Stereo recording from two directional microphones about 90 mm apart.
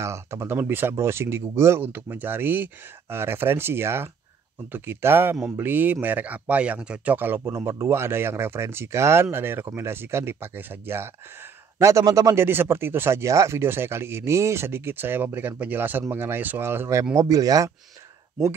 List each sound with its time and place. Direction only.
0.0 s speech: 30° right (ahead or behind)
12.4 s speech: 25° right (ahead or behind)
17.1 s speech: 35° right (ahead or behind)